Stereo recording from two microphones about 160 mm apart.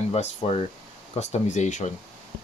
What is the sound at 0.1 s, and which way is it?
Speech, 40° left (ahead or behind).